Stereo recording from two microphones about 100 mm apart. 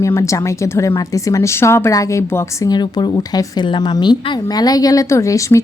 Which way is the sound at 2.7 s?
45° left (ahead or behind).